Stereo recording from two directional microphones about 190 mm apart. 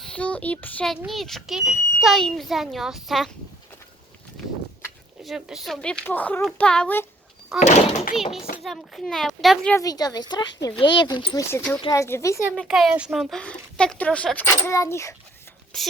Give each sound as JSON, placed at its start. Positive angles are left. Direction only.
{"t": 0.0, "sound": "speech", "side_deg": 5}
{"t": 5.2, "sound": "speech", "side_deg": 0}
{"t": 7.6, "sound": "a child's voice", "side_deg": 40}
{"t": 8.1, "sound": "speech", "side_deg": 0}
{"t": 9.7, "sound": "speech", "side_deg": 20}
{"t": 12.5, "sound": "speech", "side_deg": 0}
{"t": 15.7, "sound": "speech", "side_deg": 0}